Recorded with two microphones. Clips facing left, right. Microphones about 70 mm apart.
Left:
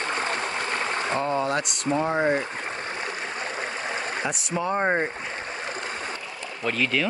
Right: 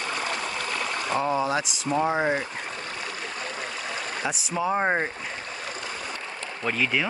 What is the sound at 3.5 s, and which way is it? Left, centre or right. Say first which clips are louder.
Stream: left 3 dB; left.